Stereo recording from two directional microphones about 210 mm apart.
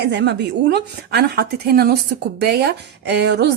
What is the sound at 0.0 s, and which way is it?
A woman's voice, 55° right (ahead or behind).